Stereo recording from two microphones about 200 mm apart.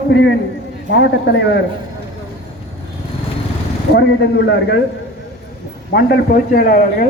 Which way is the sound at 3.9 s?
60° left (ahead or behind).